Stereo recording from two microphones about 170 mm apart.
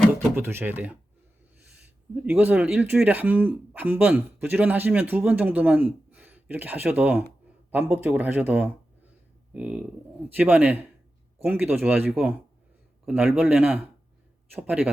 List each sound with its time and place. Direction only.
0.3 s speech: 10° right (ahead or behind)
2.2 s speech: 10° right (ahead or behind)